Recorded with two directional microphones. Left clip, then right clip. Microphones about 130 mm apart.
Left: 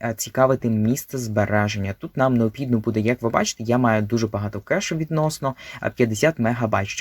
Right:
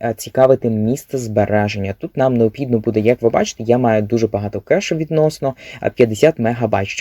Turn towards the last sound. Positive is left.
turn(degrees=-20)  # may be behind; listen again after turning